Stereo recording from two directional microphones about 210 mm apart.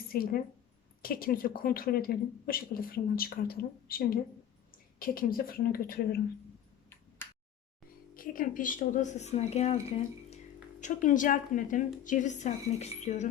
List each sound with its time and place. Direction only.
0.1 s a woman's voice: 45° left (ahead or behind)
8.1 s a woman's voice: 40° left (ahead or behind)
10.8 s a woman's voice: 35° left (ahead or behind)